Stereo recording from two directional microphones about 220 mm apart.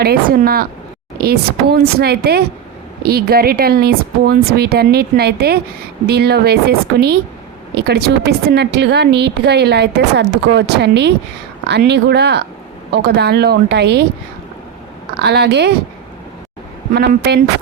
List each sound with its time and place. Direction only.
0.0 s a woman's voice: 45° right (ahead or behind)
15.2 s a woman's voice: 50° right (ahead or behind)
16.9 s a woman's voice: 50° right (ahead or behind)